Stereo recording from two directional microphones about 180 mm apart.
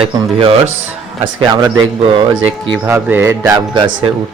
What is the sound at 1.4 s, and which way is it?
Speech, 25° right (ahead or behind).